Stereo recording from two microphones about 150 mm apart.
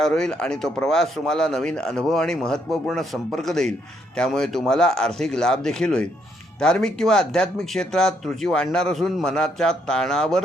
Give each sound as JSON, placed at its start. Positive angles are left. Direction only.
{"t": 0.0, "sound": "speech", "side_deg": 5}